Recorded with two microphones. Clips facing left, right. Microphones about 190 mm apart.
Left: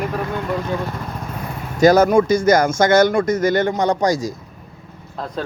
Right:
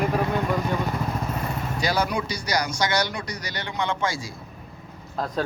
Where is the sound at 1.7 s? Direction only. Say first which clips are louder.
Left 14 dB; 45° left (ahead or behind).